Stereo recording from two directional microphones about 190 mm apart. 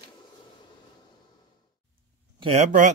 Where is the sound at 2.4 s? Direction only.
35° right (ahead or behind).